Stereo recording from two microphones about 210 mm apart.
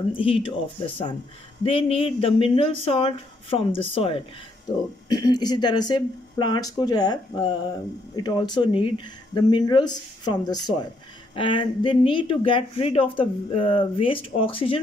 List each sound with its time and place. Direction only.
0.1 s speech: 25° left (ahead or behind)